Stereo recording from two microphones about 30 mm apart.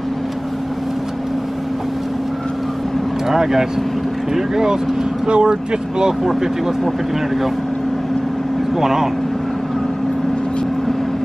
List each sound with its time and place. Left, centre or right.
3.3 s speech: centre
5.2 s speech: right
8.7 s speech: centre